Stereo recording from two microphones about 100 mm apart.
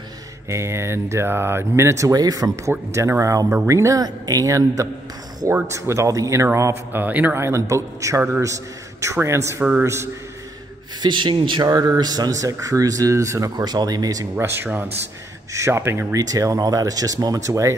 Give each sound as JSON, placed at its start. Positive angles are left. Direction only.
{"t": 0.5, "sound": "speech", "side_deg": -30}
{"t": 7.4, "sound": "speech", "side_deg": -30}
{"t": 11.0, "sound": "speech", "side_deg": -50}
{"t": 11.7, "sound": "speech", "side_deg": -35}
{"t": 14.3, "sound": "speech", "side_deg": -25}